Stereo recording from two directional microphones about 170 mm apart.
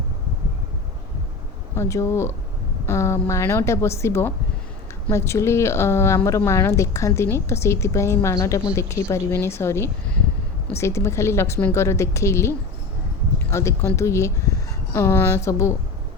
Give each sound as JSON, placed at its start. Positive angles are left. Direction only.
{"t": 1.7, "sound": "speech", "side_deg": 15}